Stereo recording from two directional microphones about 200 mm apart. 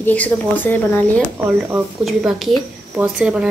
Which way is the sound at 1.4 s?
5° right (ahead or behind).